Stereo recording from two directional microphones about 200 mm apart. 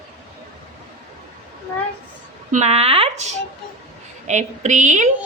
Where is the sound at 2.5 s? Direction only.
35° right (ahead or behind).